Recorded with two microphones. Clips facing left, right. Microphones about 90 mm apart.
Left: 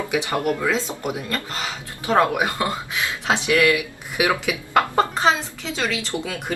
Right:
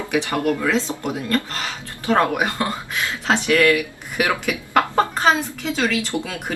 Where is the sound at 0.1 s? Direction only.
15° left (ahead or behind).